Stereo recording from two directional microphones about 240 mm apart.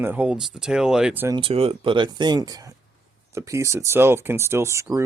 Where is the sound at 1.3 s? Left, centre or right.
Right.